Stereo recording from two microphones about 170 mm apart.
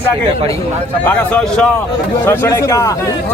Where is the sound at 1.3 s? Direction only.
5° left (ahead or behind).